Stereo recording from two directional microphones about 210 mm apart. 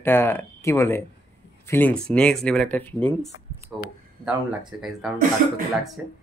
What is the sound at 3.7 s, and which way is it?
Speech, 5° right (ahead or behind).